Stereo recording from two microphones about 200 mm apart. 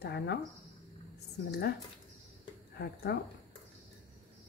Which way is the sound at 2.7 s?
55° left (ahead or behind).